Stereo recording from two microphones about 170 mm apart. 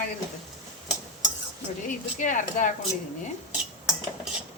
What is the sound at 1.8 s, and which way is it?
Speech, 50° left (ahead or behind).